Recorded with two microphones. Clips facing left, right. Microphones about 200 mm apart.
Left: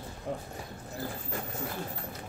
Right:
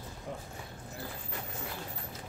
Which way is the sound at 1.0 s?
45° left (ahead or behind).